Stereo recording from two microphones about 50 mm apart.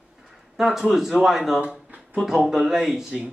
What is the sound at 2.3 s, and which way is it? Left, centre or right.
A man's voice, centre.